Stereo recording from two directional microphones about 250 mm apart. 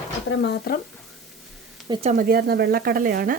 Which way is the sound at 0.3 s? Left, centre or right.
Left.